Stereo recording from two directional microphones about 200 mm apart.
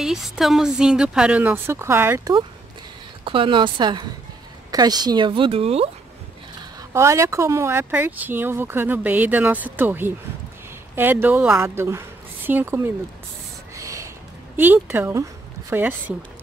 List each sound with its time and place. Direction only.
0.0 s a woman's voice: centre (ahead or behind)
3.3 s speech: 25° right (ahead or behind)
6.9 s speech: 15° right (ahead or behind)
13.7 s a sound: 15° right (ahead or behind)
14.6 s speech: 10° right (ahead or behind)